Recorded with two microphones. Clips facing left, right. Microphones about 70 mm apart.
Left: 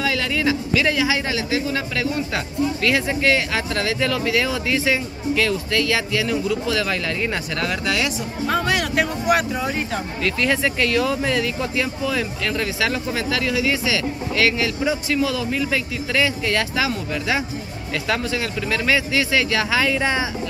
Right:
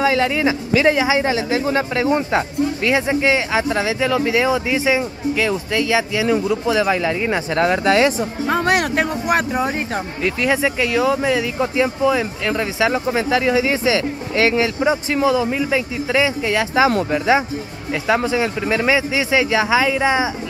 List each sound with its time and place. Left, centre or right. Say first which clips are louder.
0.0 s speech: right 5 dB; right
2.3 s speech: right 4 dB; centre; by 9.8 s right
10.2 s speech: right 3 dB; centre
11.6 s speech: right 6 dB; right
18.0 s speech: right 6 dB; centre